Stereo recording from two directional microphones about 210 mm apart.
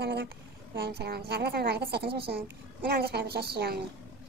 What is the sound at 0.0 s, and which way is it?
A woman's voice, 55° right (ahead or behind).